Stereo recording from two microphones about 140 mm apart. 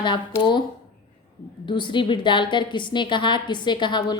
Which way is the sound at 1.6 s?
35° left (ahead or behind).